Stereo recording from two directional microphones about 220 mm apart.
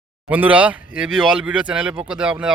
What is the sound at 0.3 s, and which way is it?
Speech, 5° right (ahead or behind).